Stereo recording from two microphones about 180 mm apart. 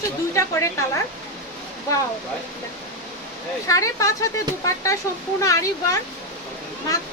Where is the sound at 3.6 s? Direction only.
20° left (ahead or behind).